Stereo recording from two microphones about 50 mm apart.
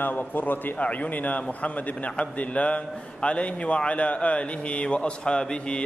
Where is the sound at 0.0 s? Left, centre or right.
Left.